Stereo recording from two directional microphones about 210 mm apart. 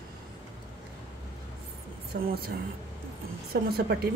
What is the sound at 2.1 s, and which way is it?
Speech, 55° right (ahead or behind).